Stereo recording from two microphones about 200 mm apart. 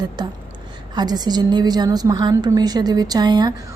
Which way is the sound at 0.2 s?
20° right (ahead or behind).